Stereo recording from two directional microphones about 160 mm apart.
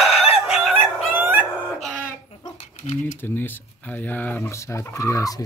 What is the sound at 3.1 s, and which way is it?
Speech, 10° left (ahead or behind).